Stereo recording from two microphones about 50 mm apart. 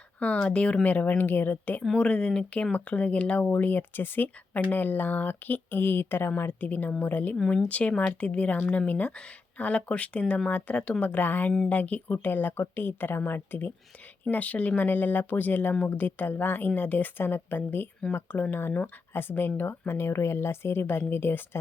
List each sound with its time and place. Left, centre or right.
0.2 s speech: left
2.0 s speech: left
3.6 s speech: left
7.5 s speech: left
19.9 s speech: left